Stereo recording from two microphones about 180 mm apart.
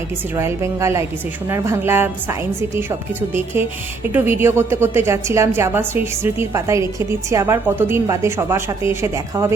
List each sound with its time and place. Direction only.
0.3 s a woman's voice: 15° right (ahead or behind)